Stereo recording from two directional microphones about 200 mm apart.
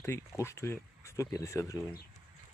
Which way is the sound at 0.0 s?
10° left (ahead or behind).